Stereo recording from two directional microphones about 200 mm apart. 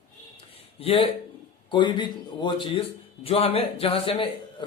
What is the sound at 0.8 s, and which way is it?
A man's voice, 30° left (ahead or behind).